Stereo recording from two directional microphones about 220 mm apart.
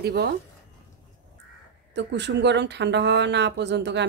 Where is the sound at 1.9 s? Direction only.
50° right (ahead or behind).